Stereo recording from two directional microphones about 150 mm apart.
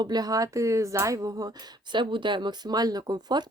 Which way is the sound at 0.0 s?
25° right (ahead or behind).